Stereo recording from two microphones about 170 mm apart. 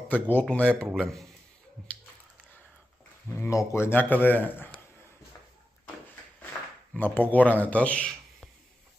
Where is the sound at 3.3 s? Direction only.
15° left (ahead or behind).